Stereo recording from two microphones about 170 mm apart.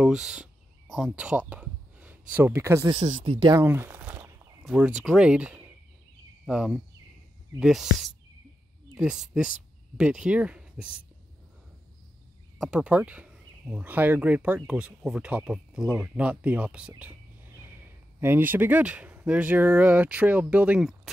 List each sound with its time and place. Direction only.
0.0 s speech: centre (ahead or behind)
1.5 s a sound: 10° right (ahead or behind)
2.9 s speech: 45° right (ahead or behind)
3.3 s speech: 25° right (ahead or behind)
3.6 s a sound: 15° right (ahead or behind)
4.6 s speech: 10° right (ahead or behind)
12.5 s speech: 5° right (ahead or behind)